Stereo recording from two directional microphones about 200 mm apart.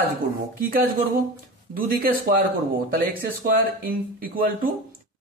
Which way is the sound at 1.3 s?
45° right (ahead or behind).